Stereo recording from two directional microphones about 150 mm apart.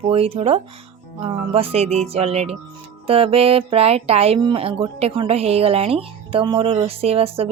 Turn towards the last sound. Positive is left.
turn(degrees=-40)  # may be behind; listen again after turning